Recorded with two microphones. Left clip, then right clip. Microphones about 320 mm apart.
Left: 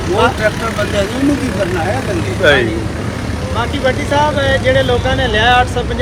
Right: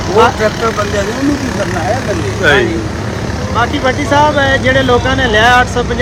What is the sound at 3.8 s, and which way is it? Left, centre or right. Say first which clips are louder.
Speech: right 2 dB; right.